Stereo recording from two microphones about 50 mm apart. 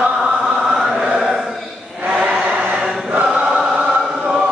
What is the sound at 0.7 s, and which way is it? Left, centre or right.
Chant, centre.